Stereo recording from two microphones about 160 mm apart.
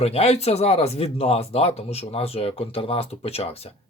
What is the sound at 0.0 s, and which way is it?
Speech, 40° left (ahead or behind).